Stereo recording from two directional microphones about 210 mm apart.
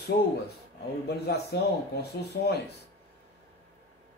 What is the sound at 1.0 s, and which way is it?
Speech, 50° left (ahead or behind).